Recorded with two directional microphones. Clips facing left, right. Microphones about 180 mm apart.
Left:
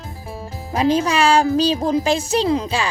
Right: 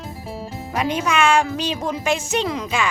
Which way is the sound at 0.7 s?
30° left (ahead or behind).